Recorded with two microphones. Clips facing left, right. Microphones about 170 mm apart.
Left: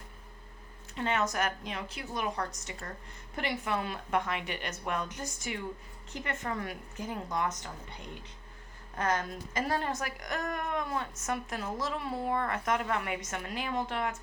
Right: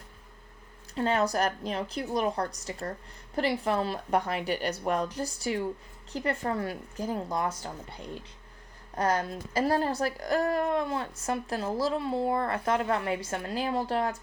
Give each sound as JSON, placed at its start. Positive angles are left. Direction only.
{"t": 0.9, "sound": "a woman's voice", "side_deg": -35}